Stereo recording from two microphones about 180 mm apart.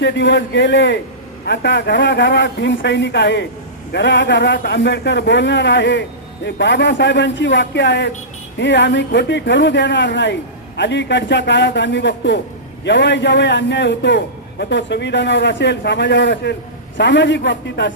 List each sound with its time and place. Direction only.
0.0 s a man's voice: 80° left
17.0 s a man's voice: 85° left